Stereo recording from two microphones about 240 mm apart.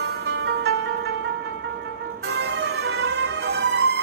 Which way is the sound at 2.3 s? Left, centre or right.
Right.